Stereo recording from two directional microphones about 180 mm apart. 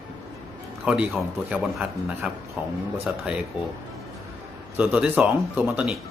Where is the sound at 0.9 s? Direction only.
5° right (ahead or behind).